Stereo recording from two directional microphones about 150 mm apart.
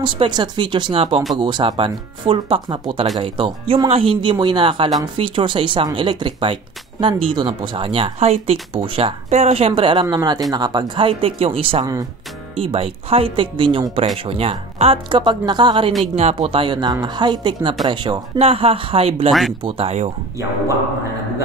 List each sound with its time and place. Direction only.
0.0 s speech: 30° right (ahead or behind)
11.8 s speech: 25° right (ahead or behind)
12.5 s speech: 40° right (ahead or behind)
16.2 s speech: 45° right (ahead or behind)